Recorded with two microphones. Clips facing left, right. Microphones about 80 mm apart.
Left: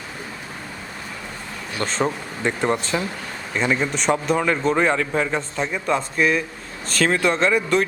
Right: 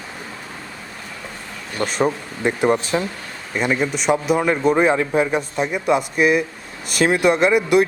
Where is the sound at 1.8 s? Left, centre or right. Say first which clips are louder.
Right 3 dB; centre.